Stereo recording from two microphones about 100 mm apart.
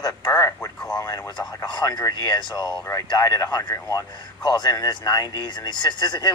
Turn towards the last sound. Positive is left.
turn(degrees=45)  # may be behind; listen again after turning